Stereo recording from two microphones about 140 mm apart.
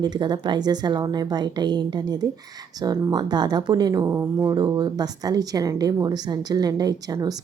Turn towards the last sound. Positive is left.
turn(degrees=-30)  # may be behind; listen again after turning